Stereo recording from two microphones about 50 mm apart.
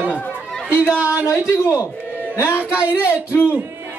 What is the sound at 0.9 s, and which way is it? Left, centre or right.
Speech, right.